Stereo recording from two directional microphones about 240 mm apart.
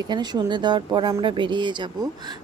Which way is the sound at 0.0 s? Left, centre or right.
Centre.